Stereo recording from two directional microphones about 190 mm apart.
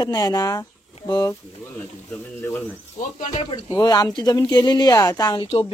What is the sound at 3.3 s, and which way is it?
Speech, 25° left (ahead or behind).